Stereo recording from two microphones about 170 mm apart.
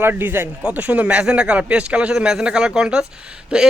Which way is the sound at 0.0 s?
10° right (ahead or behind).